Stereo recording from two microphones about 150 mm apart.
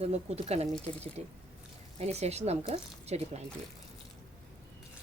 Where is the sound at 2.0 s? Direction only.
45° right (ahead or behind).